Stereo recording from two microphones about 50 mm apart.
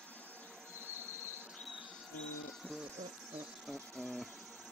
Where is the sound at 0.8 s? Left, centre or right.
Right.